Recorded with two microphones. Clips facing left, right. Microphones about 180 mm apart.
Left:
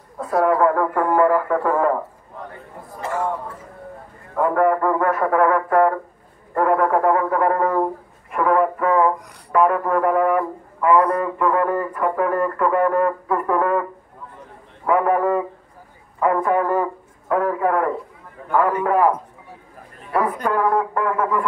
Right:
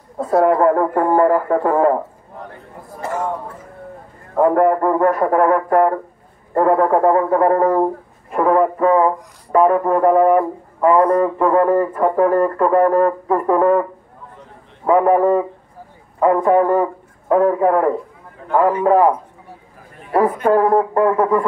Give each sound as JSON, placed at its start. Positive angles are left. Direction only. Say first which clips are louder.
{"t": 0.2, "sound": "a man's voice", "louder": "right 4 dB", "side_deg": -25}
{"t": 0.6, "sound": "speech", "louder": "right 3 dB", "side_deg": -35}
{"t": 4.4, "sound": "speech", "louder": "right 4 dB", "side_deg": -35}
{"t": 14.9, "sound": "a man's voice", "louder": "right 5 dB", "side_deg": -30}
{"t": 16.4, "sound": "a man's voice", "louder": "right 5 dB", "side_deg": -30}
{"t": 20.6, "sound": "speech", "louder": "right 6 dB", "side_deg": -35}